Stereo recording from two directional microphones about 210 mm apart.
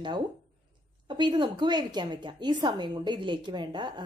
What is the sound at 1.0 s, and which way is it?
Speech, 20° right (ahead or behind).